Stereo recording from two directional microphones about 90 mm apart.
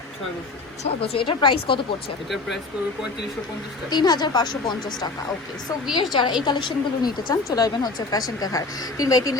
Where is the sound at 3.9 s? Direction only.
50° left (ahead or behind).